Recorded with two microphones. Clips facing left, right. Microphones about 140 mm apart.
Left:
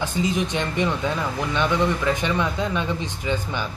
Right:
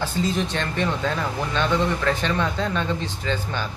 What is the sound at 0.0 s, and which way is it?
Speech, 15° left (ahead or behind).